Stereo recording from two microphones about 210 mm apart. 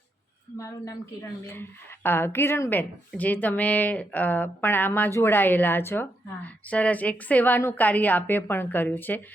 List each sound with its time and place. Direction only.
0.6 s a woman's voice: 15° left (ahead or behind)
2.0 s a woman's voice: 10° left (ahead or behind)